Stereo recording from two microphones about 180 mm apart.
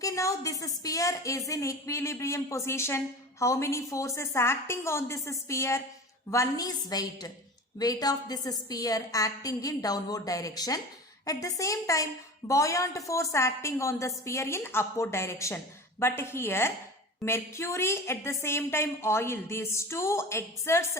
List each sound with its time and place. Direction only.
0.0 s a woman's voice: 20° left (ahead or behind)